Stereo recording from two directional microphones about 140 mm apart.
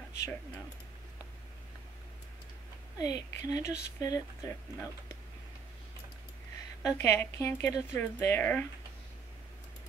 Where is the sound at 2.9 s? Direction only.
25° left (ahead or behind).